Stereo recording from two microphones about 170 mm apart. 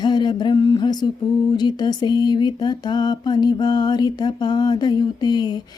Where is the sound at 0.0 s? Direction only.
25° left (ahead or behind).